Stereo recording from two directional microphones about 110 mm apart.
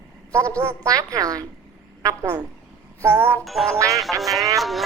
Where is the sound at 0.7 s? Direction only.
30° right (ahead or behind).